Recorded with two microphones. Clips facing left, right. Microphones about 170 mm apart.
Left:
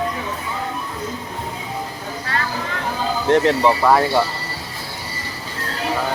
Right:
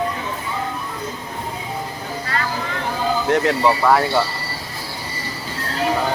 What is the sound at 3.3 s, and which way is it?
Speech, 25° left (ahead or behind).